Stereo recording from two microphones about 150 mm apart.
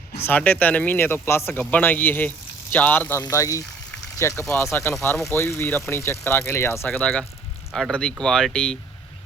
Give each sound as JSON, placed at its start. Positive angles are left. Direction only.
{"t": 0.3, "sound": "speech", "side_deg": 10}
{"t": 6.8, "sound": "speech", "side_deg": 5}